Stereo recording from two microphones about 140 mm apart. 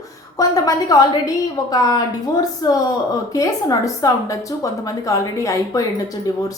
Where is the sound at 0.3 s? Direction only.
25° left (ahead or behind).